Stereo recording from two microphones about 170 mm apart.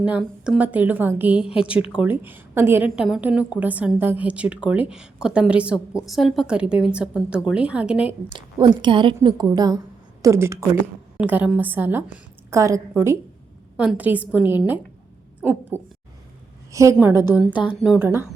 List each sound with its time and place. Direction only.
0.0 s a woman's voice: 5° right (ahead or behind)
8.3 s a woman's voice: 30° right (ahead or behind)
17.8 s speech: 5° right (ahead or behind)